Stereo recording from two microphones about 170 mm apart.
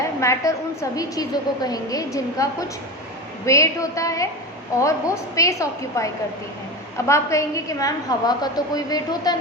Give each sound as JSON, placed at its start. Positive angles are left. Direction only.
{"t": 0.2, "sound": "a woman's voice", "side_deg": 15}